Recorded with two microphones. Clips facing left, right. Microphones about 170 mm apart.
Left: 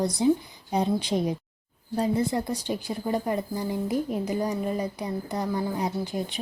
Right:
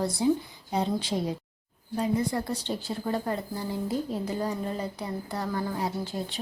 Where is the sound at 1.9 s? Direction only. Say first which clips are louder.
Left 2 dB; 35° left (ahead or behind).